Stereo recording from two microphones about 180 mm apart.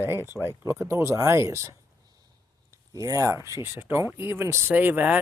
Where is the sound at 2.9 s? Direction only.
20° right (ahead or behind).